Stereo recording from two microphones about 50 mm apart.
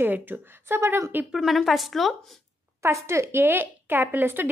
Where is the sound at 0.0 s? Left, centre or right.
Right.